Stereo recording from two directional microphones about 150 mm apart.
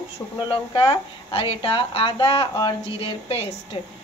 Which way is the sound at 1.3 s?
35° left (ahead or behind).